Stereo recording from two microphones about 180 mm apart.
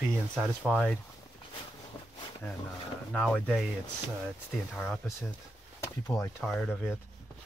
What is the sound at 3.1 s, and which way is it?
Speech, 5° left (ahead or behind).